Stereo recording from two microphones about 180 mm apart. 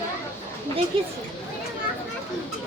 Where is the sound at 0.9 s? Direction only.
30° right (ahead or behind).